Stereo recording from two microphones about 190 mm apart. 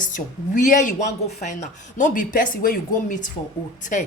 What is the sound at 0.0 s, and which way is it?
Speech, 45° left (ahead or behind).